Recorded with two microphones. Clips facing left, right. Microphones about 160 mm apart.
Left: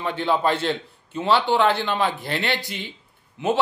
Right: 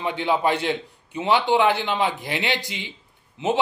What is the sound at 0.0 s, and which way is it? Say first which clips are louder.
Speech: even; 15° right (ahead or behind).